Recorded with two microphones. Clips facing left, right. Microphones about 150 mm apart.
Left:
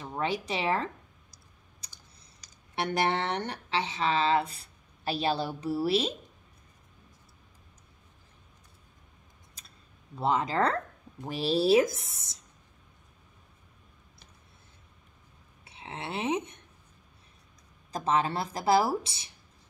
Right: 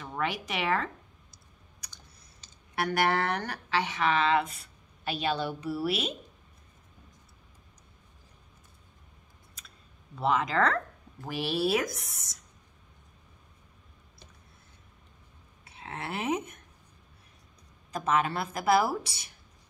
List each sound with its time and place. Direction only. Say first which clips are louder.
0.0 s speech: left 1 dB; 30° left (ahead or behind)
2.7 s speech: right 1 dB; 25° left (ahead or behind)
10.1 s a woman's voice: even; 30° left (ahead or behind)
15.6 s a sound: even; 20° left (ahead or behind)
17.9 s a woman's voice: even; 30° left (ahead or behind)